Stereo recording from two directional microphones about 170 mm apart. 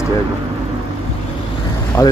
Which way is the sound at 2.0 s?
15° left (ahead or behind).